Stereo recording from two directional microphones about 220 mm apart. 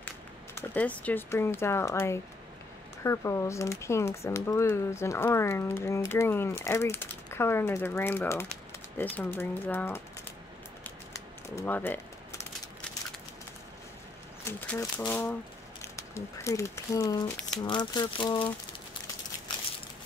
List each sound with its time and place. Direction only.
0.6 s speech: 5° left (ahead or behind)
11.1 s crumpling: 10° left (ahead or behind)
14.4 s speech: 10° left (ahead or behind)